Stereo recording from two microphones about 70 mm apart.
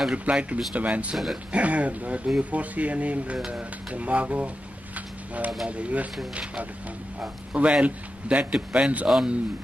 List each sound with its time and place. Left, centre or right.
0.1 s speech: centre
1.1 s speech: centre
1.5 s speech: centre
4.9 s a sound: right
5.7 s a man's voice: centre